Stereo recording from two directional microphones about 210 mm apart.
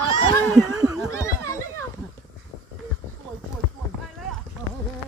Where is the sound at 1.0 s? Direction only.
15° left (ahead or behind).